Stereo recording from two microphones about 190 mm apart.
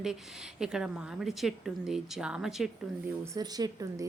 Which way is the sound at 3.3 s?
20° right (ahead or behind).